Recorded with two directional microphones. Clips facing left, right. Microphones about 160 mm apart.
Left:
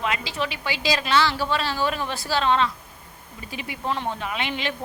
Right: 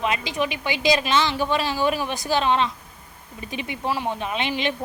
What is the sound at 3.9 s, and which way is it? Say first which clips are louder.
Speech: right 1 dB; 10° right (ahead or behind).